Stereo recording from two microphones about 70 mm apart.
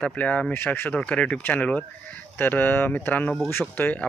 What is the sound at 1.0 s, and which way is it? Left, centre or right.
Speech, centre.